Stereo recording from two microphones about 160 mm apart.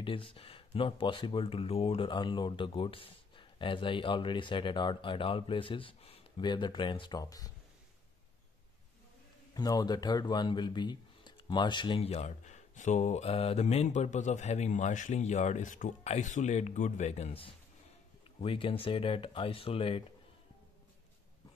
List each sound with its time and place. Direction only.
0.0 s speech: 35° left (ahead or behind)
9.5 s speech: 25° left (ahead or behind)